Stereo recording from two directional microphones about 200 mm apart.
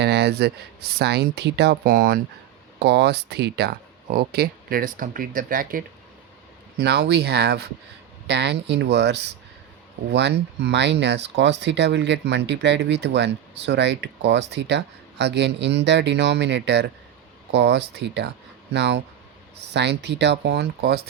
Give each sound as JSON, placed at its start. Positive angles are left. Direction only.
{"t": 0.0, "sound": "speech", "side_deg": -55}
{"t": 2.7, "sound": "speech", "side_deg": -55}
{"t": 6.7, "sound": "speech", "side_deg": -55}